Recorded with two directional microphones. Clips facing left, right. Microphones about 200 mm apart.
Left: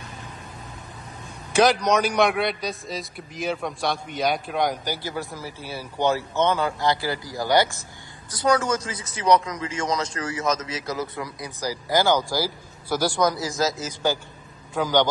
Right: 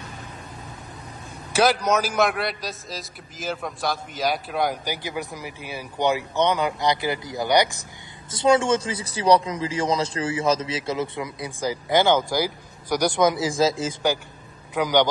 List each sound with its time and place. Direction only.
1.5 s a man's voice: 5° right (ahead or behind); by 13.9 s 30° right (ahead or behind)
14.7 s a man's voice: 20° right (ahead or behind)